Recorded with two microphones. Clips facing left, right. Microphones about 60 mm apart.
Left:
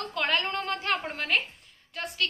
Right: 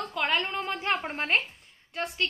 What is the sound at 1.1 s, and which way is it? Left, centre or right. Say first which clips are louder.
Speech: right 1 dB; right.